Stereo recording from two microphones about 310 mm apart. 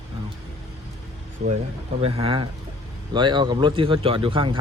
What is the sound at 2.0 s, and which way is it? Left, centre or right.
A man's voice, centre.